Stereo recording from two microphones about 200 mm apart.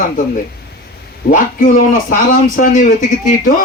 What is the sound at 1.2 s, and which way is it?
A man's voice, 50° left (ahead or behind).